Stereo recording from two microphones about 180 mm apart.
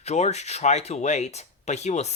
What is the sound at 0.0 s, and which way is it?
Speech, 35° left (ahead or behind).